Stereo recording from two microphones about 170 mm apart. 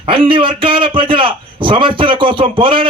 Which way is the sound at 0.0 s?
30° right (ahead or behind).